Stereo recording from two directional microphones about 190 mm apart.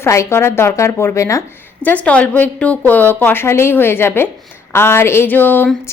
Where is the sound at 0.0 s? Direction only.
15° left (ahead or behind).